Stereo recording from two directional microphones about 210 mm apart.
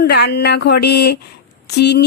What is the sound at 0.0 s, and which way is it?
A woman's voice, 50° left (ahead or behind).